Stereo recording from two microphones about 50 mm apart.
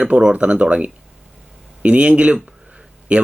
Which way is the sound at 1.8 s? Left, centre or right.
Right.